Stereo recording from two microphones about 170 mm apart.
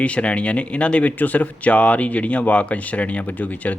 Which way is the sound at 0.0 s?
5° left (ahead or behind).